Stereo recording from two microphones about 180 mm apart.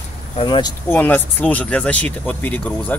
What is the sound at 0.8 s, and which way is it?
Speech, 10° left (ahead or behind).